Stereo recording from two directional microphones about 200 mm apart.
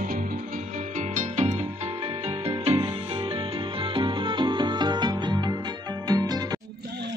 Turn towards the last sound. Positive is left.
turn(degrees=-20)  # may be behind; listen again after turning